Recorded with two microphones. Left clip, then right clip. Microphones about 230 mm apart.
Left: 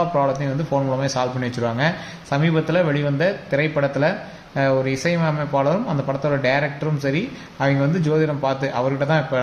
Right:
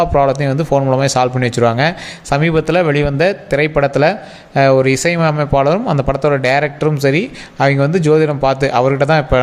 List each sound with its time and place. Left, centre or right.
0.0 s speech: right